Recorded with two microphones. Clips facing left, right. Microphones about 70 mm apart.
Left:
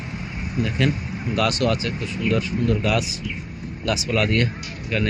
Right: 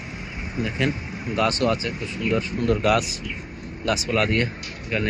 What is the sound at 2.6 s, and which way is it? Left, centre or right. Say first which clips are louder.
Speech: right 1 dB; right.